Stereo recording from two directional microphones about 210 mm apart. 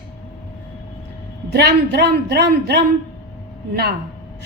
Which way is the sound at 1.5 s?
50° right (ahead or behind).